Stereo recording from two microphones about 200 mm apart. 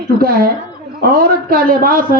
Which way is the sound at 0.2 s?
50° right (ahead or behind).